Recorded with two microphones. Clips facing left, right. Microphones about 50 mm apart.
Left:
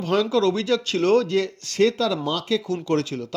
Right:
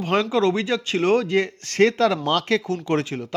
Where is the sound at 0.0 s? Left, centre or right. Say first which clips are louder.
Even; right.